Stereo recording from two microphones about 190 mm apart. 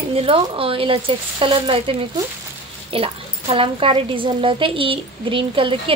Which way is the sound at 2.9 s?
30° right (ahead or behind).